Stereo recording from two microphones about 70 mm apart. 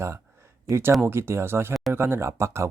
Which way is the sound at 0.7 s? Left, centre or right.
Right.